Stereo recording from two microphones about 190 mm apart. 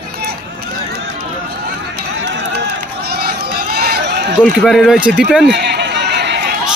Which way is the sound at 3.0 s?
55° right (ahead or behind).